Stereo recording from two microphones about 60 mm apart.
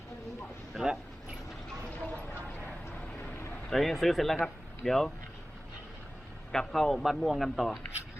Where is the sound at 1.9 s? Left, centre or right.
Left.